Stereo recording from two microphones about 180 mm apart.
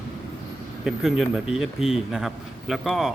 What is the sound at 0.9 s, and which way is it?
A man's voice, centre (ahead or behind).